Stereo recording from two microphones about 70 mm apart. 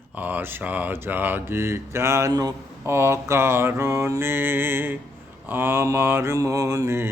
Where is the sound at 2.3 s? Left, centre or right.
Right.